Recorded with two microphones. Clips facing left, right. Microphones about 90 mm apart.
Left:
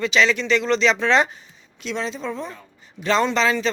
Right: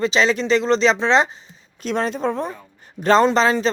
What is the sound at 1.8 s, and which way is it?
Speech, 50° right (ahead or behind).